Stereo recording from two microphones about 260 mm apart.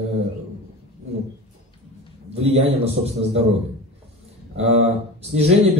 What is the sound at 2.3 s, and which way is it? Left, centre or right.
Speech, right.